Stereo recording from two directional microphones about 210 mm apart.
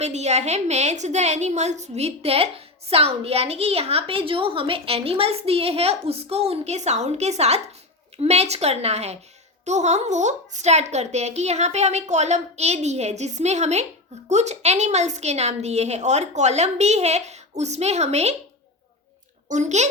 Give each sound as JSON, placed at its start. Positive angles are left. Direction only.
{"t": 0.0, "sound": "a woman's voice", "side_deg": -30}
{"t": 19.5, "sound": "speech", "side_deg": -35}